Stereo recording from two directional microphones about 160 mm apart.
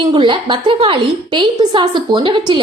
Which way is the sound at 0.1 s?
30° right (ahead or behind).